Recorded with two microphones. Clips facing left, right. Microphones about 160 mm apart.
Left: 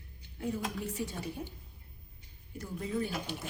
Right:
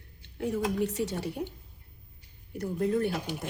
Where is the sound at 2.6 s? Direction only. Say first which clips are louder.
Right 8 dB; 60° right (ahead or behind).